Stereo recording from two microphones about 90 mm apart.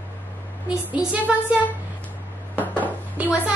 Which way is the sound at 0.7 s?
10° right (ahead or behind).